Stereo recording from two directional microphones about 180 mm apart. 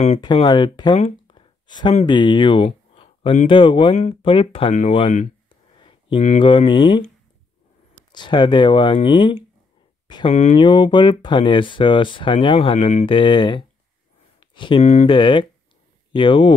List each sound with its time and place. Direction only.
0.2 s speech: 25° left (ahead or behind)
0.9 s a sound: 30° left (ahead or behind)
2.0 s speech: 25° left (ahead or behind)
5.5 s a sound: 30° left (ahead or behind)
6.4 s speech: 30° left (ahead or behind)
8.1 s speech: 25° left (ahead or behind)
10.3 s speech: 40° left (ahead or behind)
10.6 s speech: 25° left (ahead or behind)
14.4 s a sound: 25° left (ahead or behind)
14.8 s speech: 40° left (ahead or behind)
15.1 s speech: 30° left (ahead or behind)